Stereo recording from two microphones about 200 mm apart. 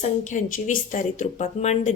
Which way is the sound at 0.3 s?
40° left (ahead or behind).